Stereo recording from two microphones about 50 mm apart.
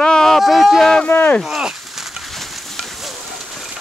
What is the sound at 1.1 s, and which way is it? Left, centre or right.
Speech, left.